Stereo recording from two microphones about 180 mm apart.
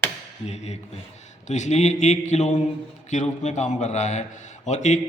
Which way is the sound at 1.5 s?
40° left (ahead or behind).